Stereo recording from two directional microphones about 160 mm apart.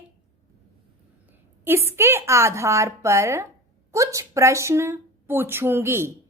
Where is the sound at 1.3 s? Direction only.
15° right (ahead or behind).